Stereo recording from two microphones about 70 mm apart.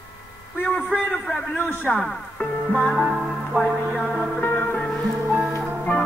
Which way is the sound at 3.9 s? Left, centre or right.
Centre.